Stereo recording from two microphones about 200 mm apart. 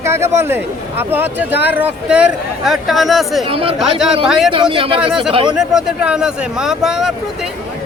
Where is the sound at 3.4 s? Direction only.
25° right (ahead or behind).